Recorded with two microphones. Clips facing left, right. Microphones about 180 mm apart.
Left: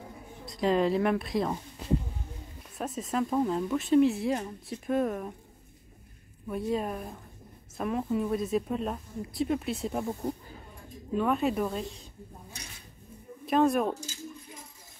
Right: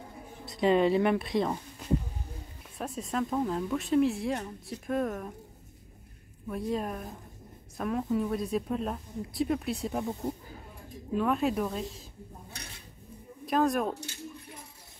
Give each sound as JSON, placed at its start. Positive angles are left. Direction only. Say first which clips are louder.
{"t": 0.5, "sound": "a woman's voice", "louder": "right 2 dB", "side_deg": 0}
{"t": 2.8, "sound": "a woman's voice", "louder": "left 2 dB", "side_deg": 0}
{"t": 6.5, "sound": "a woman's voice", "louder": "left 2 dB", "side_deg": 0}
{"t": 13.5, "sound": "a woman's voice", "louder": "left 2 dB", "side_deg": 0}
{"t": 13.9, "sound": "cutlery", "louder": "even", "side_deg": -65}